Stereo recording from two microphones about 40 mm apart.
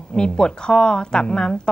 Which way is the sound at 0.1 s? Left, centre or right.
Left.